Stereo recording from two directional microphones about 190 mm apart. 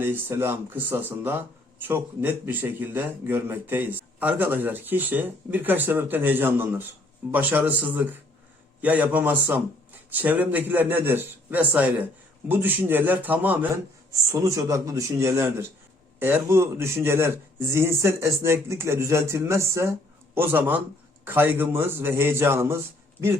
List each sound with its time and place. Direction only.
0.0 s speech: 10° right (ahead or behind)